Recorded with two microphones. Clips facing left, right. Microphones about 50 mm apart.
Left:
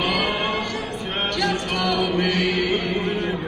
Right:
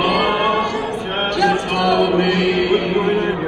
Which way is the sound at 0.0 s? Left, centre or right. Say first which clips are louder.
Right 6 dB; centre.